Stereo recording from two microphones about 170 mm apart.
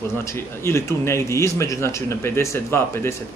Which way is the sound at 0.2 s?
15° left (ahead or behind).